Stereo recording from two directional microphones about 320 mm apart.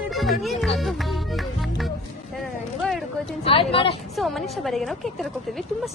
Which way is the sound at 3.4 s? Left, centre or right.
Centre.